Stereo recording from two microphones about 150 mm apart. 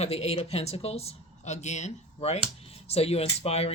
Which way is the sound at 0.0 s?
45° left (ahead or behind).